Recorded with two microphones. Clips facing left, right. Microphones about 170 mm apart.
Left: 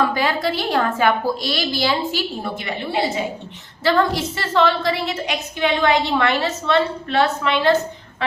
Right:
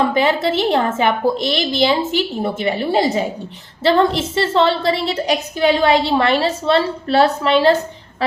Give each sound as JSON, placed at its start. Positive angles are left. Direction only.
{"t": 0.0, "sound": "a woman's voice", "side_deg": -25}
{"t": 3.8, "sound": "a woman's voice", "side_deg": -25}